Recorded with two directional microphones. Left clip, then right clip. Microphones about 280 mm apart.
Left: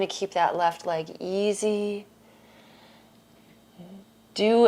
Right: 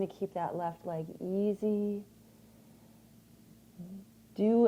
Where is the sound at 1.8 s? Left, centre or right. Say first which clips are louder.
Left 6 dB; left.